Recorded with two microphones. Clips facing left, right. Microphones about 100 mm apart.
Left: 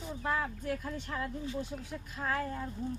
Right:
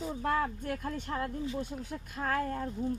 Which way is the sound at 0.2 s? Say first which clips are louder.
Right 2 dB; 50° right (ahead or behind).